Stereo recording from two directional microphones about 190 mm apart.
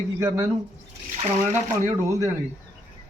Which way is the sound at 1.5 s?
15° right (ahead or behind).